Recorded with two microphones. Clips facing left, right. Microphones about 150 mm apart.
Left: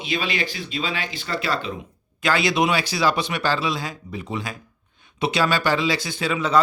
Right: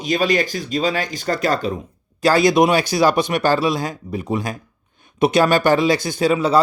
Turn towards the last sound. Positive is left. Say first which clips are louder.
# right 5 dB
turn(degrees=-35)  # may be behind; listen again after turning